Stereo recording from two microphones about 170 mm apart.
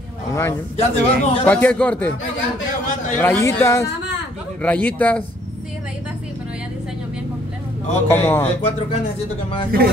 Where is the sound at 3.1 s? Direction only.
10° left (ahead or behind).